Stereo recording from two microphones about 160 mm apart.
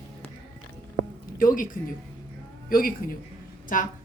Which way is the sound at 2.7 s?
65° left (ahead or behind).